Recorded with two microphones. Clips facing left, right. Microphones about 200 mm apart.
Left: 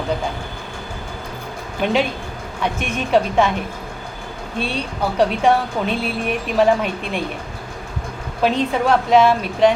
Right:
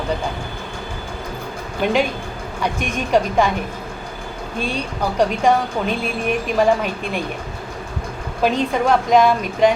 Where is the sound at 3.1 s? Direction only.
Centre (ahead or behind).